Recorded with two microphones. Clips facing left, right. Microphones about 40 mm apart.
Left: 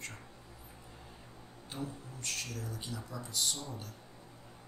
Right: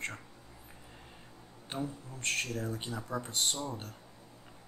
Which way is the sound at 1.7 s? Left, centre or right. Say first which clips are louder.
Right 4 dB; right.